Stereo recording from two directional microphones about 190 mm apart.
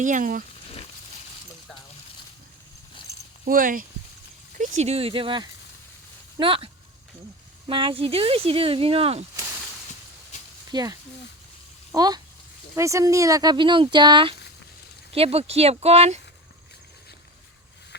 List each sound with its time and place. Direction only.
0.0 s speech: 45° right (ahead or behind)
3.4 s speech: 45° right (ahead or behind)
4.8 s speech: 35° right (ahead or behind)
7.7 s speech: 25° right (ahead or behind)
10.7 s speech: 20° right (ahead or behind)